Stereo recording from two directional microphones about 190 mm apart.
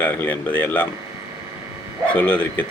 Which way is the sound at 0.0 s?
10° left (ahead or behind).